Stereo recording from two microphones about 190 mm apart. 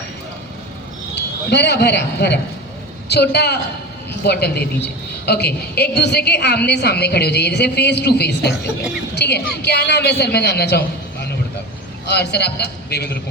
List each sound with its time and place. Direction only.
1.1 s a man's voice: 60° left (ahead or behind)